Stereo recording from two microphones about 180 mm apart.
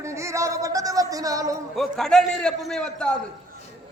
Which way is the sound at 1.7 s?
Centre (ahead or behind).